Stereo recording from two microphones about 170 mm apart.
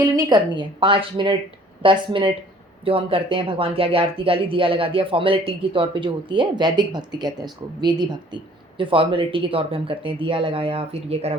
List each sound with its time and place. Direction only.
0.0 s speech: 25° right (ahead or behind)